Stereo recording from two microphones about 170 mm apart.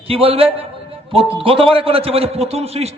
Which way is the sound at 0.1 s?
35° right (ahead or behind).